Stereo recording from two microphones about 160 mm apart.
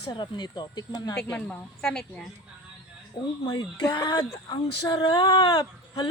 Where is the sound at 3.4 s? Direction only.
25° left (ahead or behind).